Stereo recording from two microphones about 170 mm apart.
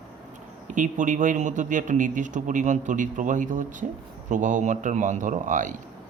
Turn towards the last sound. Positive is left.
turn(degrees=-50)  # may be behind; listen again after turning